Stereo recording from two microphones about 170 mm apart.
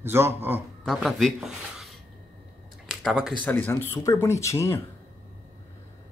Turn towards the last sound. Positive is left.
turn(degrees=15)  # may be behind; listen again after turning